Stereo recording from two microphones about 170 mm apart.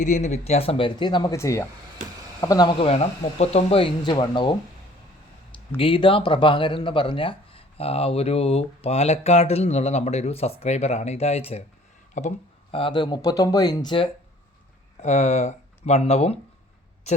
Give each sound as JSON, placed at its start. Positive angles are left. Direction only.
{"t": 0.0, "sound": "speech", "side_deg": 45}
{"t": 5.7, "sound": "speech", "side_deg": 30}
{"t": 12.7, "sound": "speech", "side_deg": 30}
{"t": 15.0, "sound": "speech", "side_deg": 45}